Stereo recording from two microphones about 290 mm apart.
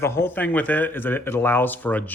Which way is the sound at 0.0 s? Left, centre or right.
Centre.